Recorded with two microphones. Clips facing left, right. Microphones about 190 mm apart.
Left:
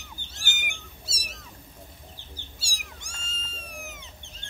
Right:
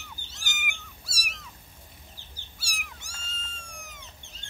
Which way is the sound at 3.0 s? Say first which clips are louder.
Left 2 dB; 5° right (ahead or behind).